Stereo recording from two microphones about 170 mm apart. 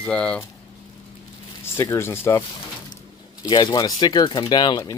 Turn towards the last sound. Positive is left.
turn(degrees=25)  # may be behind; listen again after turning